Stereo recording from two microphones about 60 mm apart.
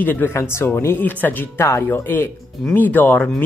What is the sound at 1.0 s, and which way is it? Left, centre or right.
Speech, left.